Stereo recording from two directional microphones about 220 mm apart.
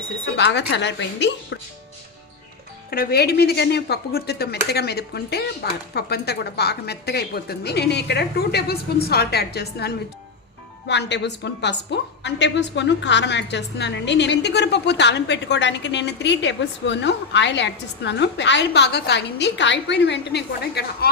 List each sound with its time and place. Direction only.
0.3 s a woman's voice: 50° left (ahead or behind)
2.9 s a woman's voice: 45° left (ahead or behind)